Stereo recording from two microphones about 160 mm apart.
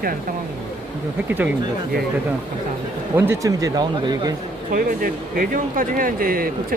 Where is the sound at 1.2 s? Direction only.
10° right (ahead or behind).